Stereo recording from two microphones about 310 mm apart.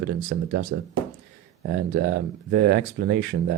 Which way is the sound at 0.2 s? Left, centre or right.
Right.